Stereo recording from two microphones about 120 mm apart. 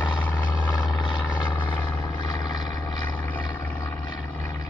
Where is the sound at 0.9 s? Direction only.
40° left (ahead or behind).